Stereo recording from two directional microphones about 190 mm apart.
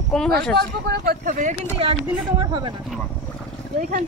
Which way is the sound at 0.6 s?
55° right (ahead or behind).